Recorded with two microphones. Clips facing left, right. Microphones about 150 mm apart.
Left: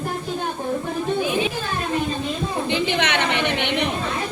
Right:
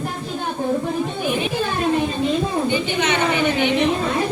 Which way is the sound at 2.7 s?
75° left (ahead or behind).